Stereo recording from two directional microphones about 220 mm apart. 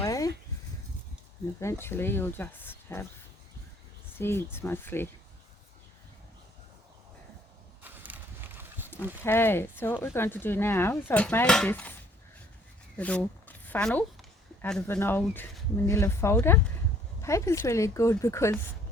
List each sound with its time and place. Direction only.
0.0 s a sound: 15° left (ahead or behind)
1.5 s speech: 10° left (ahead or behind)
4.2 s speech: 10° left (ahead or behind)
7.8 s horse: 10° right (ahead or behind)
9.2 s speech: 10° left (ahead or behind)
13.0 s speech: 5° left (ahead or behind)